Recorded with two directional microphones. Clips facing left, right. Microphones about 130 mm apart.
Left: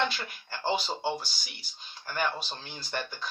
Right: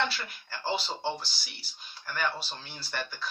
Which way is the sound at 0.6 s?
15° left (ahead or behind).